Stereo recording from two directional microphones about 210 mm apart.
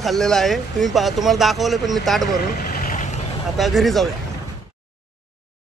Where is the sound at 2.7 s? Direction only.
40° left (ahead or behind).